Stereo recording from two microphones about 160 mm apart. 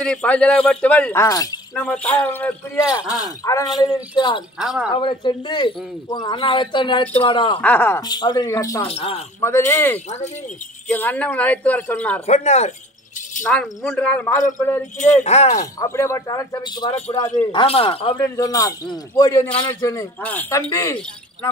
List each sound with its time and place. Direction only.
0.0 s speech: 5° left (ahead or behind)
1.8 s speech: 10° left (ahead or behind); by 4.4 s 30° left (ahead or behind)
4.6 s speech: 5° right (ahead or behind)
4.9 s a man's voice: 30° left (ahead or behind)
7.6 s speech: 10° left (ahead or behind)
8.1 s speech: 25° left (ahead or behind)
8.8 s a man's voice: 40° left (ahead or behind)
9.4 s speech: 15° left (ahead or behind)
12.3 s speech: 45° left (ahead or behind)
13.4 s speech: 5° left (ahead or behind)
15.2 s speech: 45° left (ahead or behind)
15.8 s a man's voice: 15° left (ahead or behind); by 18.1 s 35° left (ahead or behind)
18.1 s speech: 20° left (ahead or behind)
20.2 s speech: 10° left (ahead or behind)